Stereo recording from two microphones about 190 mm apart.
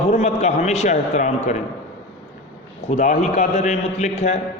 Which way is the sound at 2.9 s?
40° left (ahead or behind).